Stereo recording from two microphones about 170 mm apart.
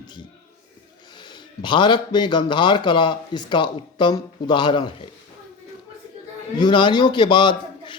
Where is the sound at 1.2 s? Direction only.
25° left (ahead or behind).